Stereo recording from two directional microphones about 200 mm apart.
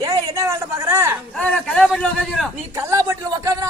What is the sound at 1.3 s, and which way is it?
A man's voice, 5° left (ahead or behind).